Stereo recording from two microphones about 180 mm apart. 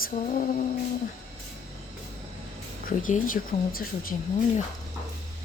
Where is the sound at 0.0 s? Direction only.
50° left (ahead or behind).